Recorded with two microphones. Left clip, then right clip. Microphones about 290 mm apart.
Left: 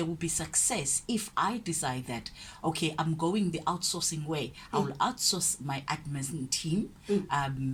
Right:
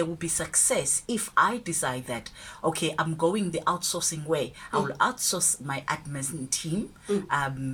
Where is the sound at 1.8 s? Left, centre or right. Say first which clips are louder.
Right 4 dB; centre.